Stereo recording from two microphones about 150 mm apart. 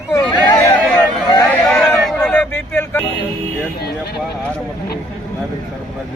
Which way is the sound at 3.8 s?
90° left.